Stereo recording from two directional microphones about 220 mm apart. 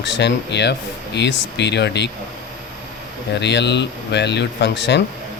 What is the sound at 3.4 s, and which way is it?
Speech, 50° left (ahead or behind).